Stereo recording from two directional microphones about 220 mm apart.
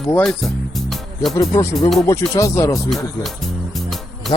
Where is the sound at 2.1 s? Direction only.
15° left (ahead or behind).